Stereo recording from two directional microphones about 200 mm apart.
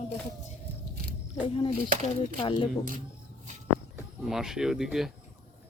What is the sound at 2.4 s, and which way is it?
Speech, 25° left (ahead or behind).